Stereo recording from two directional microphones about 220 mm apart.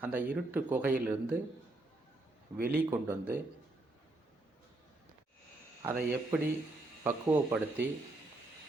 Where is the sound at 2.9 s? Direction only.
10° right (ahead or behind).